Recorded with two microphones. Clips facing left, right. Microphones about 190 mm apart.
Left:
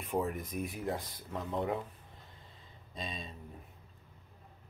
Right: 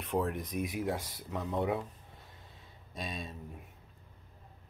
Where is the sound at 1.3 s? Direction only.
10° right (ahead or behind).